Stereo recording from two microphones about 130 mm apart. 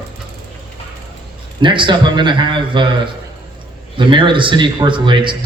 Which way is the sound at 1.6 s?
40° right (ahead or behind).